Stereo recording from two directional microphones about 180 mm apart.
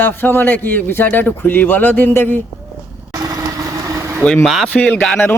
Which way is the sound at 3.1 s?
20° right (ahead or behind).